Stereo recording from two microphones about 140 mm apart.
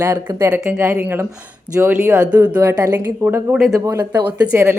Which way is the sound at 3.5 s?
Centre (ahead or behind).